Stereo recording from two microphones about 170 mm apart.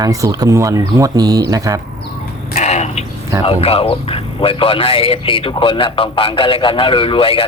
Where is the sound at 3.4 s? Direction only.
35° left (ahead or behind).